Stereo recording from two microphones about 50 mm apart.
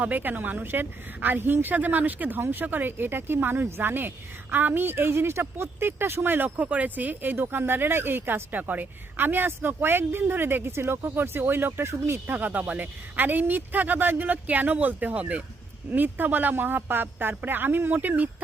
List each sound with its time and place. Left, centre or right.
0.0 s a woman's voice: right
8.5 s speech: right
11.2 s speech: right
11.9 s speech: right
12.3 s a woman's voice: right
15.9 s speech: right
17.9 s a woman's voice: right